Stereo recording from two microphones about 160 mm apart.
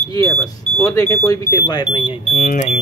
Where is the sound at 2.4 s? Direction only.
55° left (ahead or behind).